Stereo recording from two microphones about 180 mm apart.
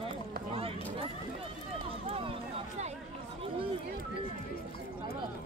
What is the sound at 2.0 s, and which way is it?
Run, 30° right (ahead or behind).